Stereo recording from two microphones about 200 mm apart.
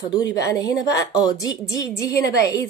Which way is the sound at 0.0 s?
20° left (ahead or behind).